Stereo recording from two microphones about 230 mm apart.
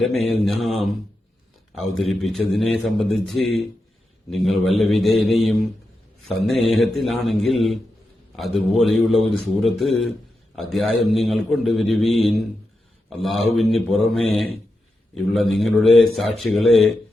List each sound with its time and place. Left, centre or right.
0.0 s a man's voice: centre
8.8 s a man's voice: centre